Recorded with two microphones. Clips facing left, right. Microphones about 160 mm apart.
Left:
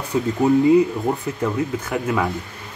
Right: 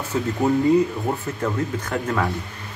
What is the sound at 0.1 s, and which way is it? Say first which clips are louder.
Speech: left 3 dB; 15° left (ahead or behind).